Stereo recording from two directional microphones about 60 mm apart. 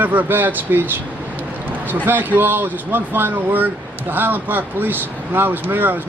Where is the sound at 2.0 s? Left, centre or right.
Right.